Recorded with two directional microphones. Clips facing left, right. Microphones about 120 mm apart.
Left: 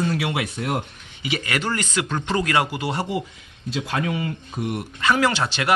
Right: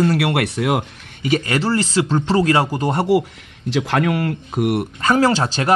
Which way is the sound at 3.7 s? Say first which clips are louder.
Right 7 dB; 90° right.